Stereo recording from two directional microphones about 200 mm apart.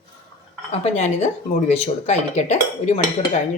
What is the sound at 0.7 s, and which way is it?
Speech, 35° left (ahead or behind).